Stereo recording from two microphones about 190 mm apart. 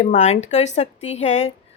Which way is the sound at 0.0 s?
35° left (ahead or behind).